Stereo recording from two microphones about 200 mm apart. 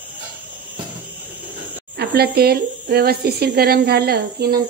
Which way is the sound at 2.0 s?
50° right (ahead or behind).